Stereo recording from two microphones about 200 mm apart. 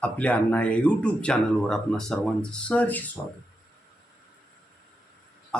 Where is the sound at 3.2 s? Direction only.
20° left (ahead or behind).